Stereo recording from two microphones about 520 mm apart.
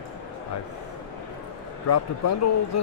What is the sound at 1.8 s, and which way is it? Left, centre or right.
Speech, left.